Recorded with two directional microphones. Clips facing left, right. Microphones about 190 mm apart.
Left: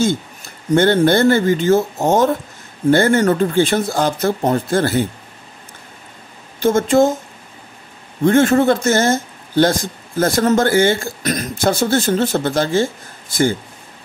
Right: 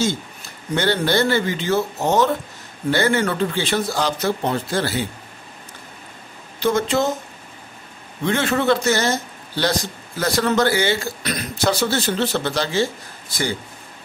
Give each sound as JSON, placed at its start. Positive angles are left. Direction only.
{"t": 0.7, "sound": "a man's voice", "side_deg": 50}
{"t": 6.6, "sound": "a man's voice", "side_deg": 50}
{"t": 8.2, "sound": "a man's voice", "side_deg": 45}